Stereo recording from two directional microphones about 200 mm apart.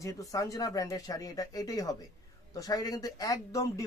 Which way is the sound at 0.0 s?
15° left (ahead or behind).